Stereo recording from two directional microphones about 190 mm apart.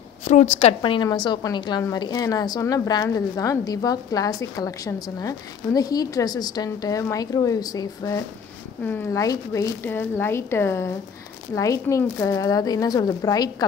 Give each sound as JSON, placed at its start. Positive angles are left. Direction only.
{"t": 0.2, "sound": "a woman's voice", "side_deg": 40}